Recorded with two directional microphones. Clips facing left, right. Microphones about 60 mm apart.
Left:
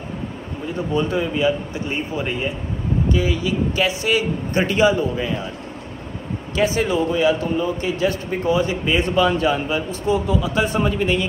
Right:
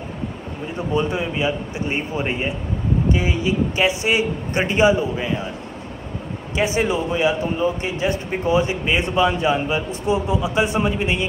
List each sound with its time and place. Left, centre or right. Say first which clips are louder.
0.7 s speech: left 1 dB; centre
6.5 s speech: left 1 dB; right